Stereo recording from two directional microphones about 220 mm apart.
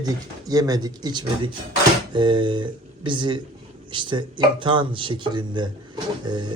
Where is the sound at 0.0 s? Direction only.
15° right (ahead or behind).